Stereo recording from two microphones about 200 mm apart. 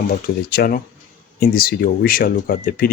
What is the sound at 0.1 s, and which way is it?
Speech, 50° left (ahead or behind).